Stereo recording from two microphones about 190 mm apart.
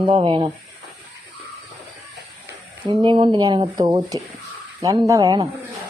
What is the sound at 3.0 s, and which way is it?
A woman's voice, 25° right (ahead or behind).